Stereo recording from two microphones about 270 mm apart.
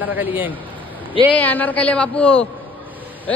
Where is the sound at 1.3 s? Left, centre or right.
Centre.